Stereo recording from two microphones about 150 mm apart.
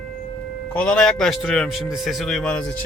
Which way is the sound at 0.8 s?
5° left (ahead or behind).